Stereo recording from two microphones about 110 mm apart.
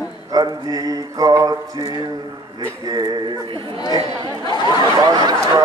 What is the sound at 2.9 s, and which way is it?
Mantra, 40° right (ahead or behind).